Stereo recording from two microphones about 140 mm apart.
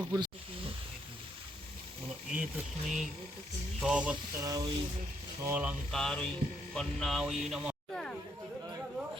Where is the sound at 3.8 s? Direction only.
5° right (ahead or behind).